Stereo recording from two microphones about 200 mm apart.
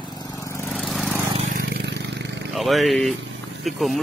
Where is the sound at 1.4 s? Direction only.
45° right (ahead or behind).